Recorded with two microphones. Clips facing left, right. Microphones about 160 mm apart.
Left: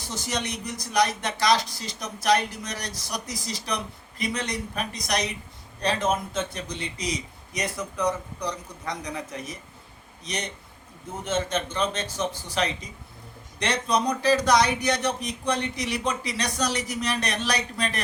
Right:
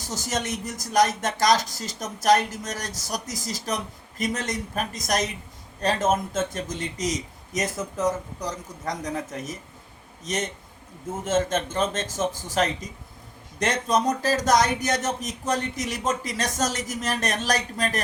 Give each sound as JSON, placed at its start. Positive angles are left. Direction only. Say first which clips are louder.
{"t": 0.0, "sound": "a man's voice", "louder": "right 2 dB", "side_deg": -45}